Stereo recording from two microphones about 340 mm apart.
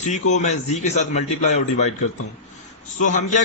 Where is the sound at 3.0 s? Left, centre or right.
Left.